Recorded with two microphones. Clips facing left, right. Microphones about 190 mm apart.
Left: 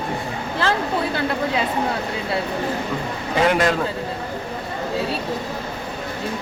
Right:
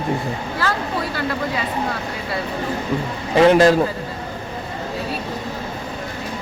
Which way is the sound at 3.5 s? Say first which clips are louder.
Right 7 dB; 30° right (ahead or behind).